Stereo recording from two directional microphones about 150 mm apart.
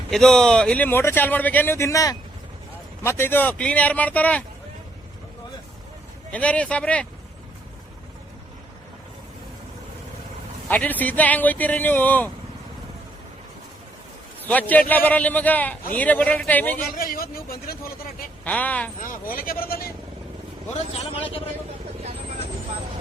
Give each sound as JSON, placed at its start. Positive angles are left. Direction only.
{"t": 0.1, "sound": "a man's voice", "side_deg": 5}
{"t": 6.3, "sound": "a man's voice", "side_deg": 10}
{"t": 10.7, "sound": "a man's voice", "side_deg": 10}
{"t": 14.4, "sound": "a man's voice", "side_deg": 10}
{"t": 17.0, "sound": "speech", "side_deg": 75}
{"t": 18.4, "sound": "a man's voice", "side_deg": 10}
{"t": 19.3, "sound": "speech", "side_deg": 75}
{"t": 20.7, "sound": "a man's voice", "side_deg": 40}